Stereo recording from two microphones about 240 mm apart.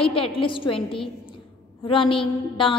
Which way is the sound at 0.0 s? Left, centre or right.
Left.